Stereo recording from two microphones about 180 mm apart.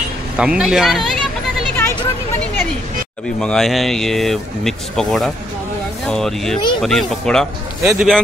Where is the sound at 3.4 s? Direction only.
5° left (ahead or behind).